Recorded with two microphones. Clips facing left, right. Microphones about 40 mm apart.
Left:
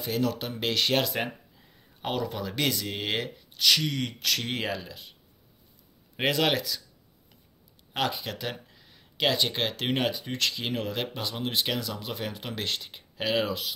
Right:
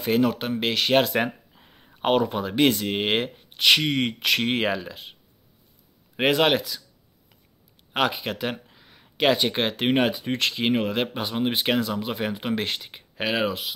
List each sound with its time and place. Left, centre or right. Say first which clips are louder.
0.2 s speech: right 6 dB; right
0.6 s speech: even; centre
1.1 s speech: right 7 dB; right
6.3 s speech: right 5 dB; right
7.9 s speech: right 5 dB; right